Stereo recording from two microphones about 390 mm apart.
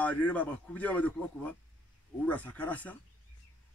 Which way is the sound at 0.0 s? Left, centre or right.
Centre.